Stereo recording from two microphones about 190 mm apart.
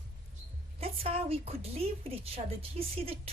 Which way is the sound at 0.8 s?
30° right (ahead or behind).